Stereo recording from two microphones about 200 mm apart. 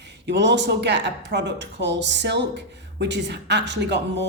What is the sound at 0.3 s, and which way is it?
Speech, 60° right (ahead or behind).